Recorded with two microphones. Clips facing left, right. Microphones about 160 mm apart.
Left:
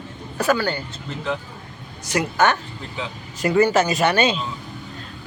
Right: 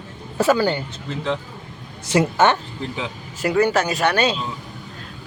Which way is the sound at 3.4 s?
Centre (ahead or behind).